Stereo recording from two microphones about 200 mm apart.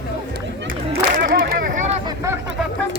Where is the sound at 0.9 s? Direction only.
50° right (ahead or behind).